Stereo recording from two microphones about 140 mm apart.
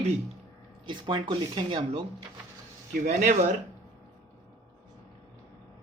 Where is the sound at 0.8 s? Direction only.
35° right (ahead or behind).